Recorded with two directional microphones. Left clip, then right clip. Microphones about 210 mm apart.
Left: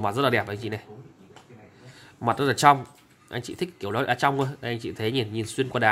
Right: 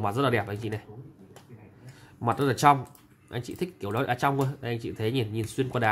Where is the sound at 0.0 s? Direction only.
5° left (ahead or behind).